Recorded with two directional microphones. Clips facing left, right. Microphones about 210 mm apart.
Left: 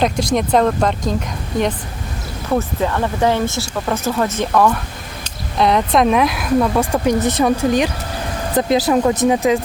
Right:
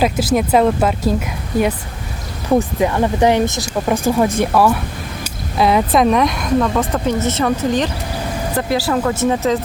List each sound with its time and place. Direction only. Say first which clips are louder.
0.0 s speech: right 1 dB; 5° right (ahead or behind)
2.5 s speech: right 3 dB; 15° right (ahead or behind); by 9.6 s 15° left (ahead or behind)